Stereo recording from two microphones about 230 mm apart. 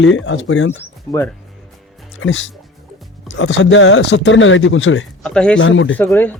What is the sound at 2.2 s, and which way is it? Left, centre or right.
Speech, left.